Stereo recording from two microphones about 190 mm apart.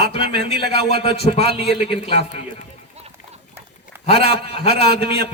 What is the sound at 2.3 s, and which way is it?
Speech, 35° left (ahead or behind).